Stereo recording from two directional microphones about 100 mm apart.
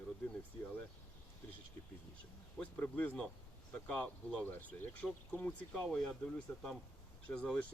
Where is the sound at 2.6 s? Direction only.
15° left (ahead or behind).